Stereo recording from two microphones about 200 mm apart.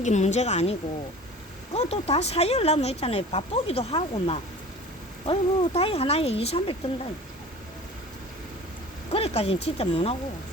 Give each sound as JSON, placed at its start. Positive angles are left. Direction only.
{"t": 0.0, "sound": "speech", "side_deg": 35}
{"t": 9.1, "sound": "speech", "side_deg": 30}